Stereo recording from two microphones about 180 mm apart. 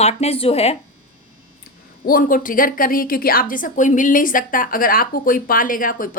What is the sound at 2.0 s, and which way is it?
A woman's voice, 50° left (ahead or behind).